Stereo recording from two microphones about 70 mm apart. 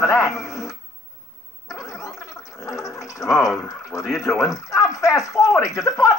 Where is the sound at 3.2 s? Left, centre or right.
Left.